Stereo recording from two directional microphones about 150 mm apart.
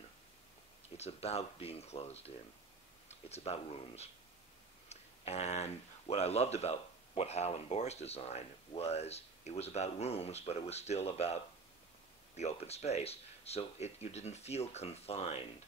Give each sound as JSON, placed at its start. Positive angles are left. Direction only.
{"t": 0.9, "sound": "speech", "side_deg": 45}